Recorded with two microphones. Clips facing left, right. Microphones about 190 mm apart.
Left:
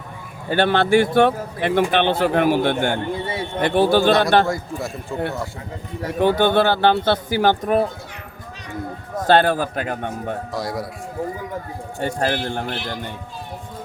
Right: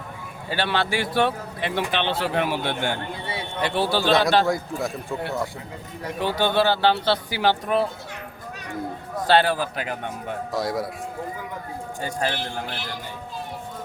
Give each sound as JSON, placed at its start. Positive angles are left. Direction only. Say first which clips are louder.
{"t": 0.5, "sound": "speech", "louder": "left 8 dB", "side_deg": 50}
{"t": 4.4, "sound": "a man's voice", "louder": "even", "side_deg": 0}
{"t": 6.1, "sound": "speech", "louder": "left 6 dB", "side_deg": 55}
{"t": 9.1, "sound": "speech", "louder": "left 4 dB", "side_deg": 50}
{"t": 10.5, "sound": "a man's voice", "louder": "right 4 dB", "side_deg": 0}
{"t": 12.2, "sound": "speech", "louder": "left 4 dB", "side_deg": 55}